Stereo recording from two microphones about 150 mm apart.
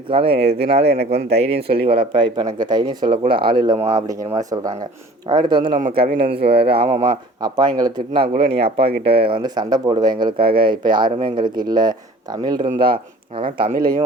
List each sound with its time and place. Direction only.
0.1 s speech: 40° right (ahead or behind)
5.7 s speech: 60° right (ahead or behind)
6.5 s speech: 40° right (ahead or behind)
7.4 s speech: 30° right (ahead or behind)
8.4 s speech: 90° right
9.0 s speech: 35° right (ahead or behind)
10.3 s speech: 80° right
10.6 s speech: 30° right (ahead or behind)